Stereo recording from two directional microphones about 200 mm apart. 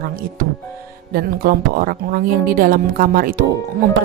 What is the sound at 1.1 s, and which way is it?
Speech, 45° right (ahead or behind).